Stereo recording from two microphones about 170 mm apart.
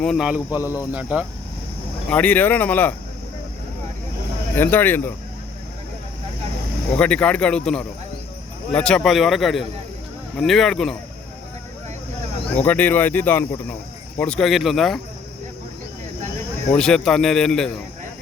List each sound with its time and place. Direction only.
0.0 s a man's voice: centre (ahead or behind)
0.6 s speech: 20° left (ahead or behind)
1.1 s speech: 10° right (ahead or behind)
2.0 s speech: 10° left (ahead or behind)
4.5 s speech: 10° left (ahead or behind)
6.9 s a man's voice: 5° left (ahead or behind)
12.6 s a man's voice: 10° left (ahead or behind)
16.7 s a man's voice: 5° left (ahead or behind)